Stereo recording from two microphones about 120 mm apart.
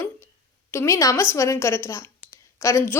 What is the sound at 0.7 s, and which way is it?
A woman's voice, 25° left (ahead or behind).